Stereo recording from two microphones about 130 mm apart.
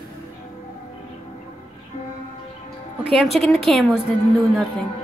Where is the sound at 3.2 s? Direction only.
Centre (ahead or behind).